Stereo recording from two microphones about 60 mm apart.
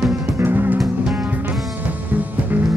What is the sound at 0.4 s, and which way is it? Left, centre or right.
Music, right.